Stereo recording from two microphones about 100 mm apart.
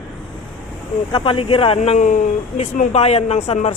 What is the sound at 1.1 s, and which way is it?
Speech, 60° left (ahead or behind).